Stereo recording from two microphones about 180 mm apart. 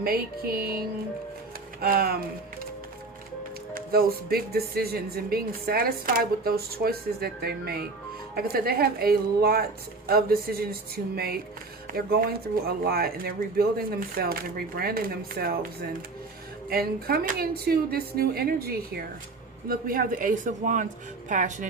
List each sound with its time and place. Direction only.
0.0 s speech: 55° right (ahead or behind)
3.8 s speech: 55° right (ahead or behind)